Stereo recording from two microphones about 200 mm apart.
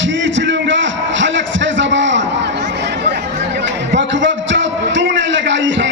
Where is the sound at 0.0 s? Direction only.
65° right (ahead or behind).